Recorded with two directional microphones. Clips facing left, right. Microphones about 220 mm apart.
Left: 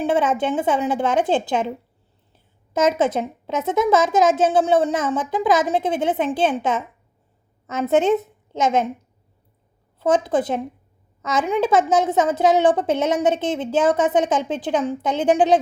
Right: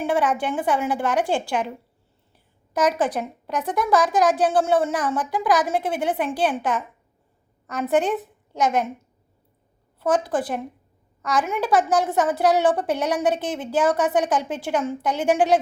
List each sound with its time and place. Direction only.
0.0 s a woman's voice: 20° left (ahead or behind)
10.0 s a woman's voice: 20° left (ahead or behind)